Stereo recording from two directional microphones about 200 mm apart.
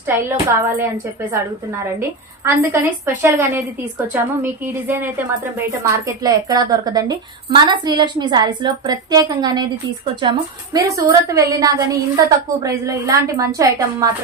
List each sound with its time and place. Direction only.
0.0 s a woman's voice: 10° right (ahead or behind)